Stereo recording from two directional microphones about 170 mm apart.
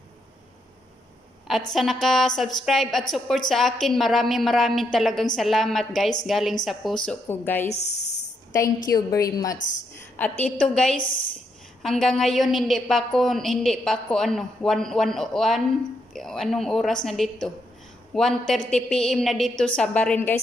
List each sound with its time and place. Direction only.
1.7 s a woman's voice: centre (ahead or behind)
7.1 s a woman's voice: 10° left (ahead or behind)
7.6 s speech: 40° left (ahead or behind)
8.9 s a woman's voice: 20° left (ahead or behind)
9.6 s a woman's voice: 50° left (ahead or behind)
10.1 s a woman's voice: 10° left (ahead or behind)
11.0 s a woman's voice: 55° left (ahead or behind)
11.8 s a woman's voice: centre (ahead or behind)